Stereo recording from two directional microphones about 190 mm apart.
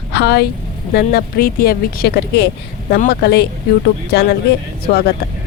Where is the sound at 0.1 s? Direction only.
60° left (ahead or behind).